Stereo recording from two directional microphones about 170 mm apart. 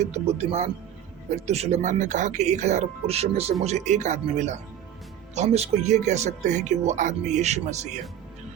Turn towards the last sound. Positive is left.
turn(degrees=-40)  # may be behind; listen again after turning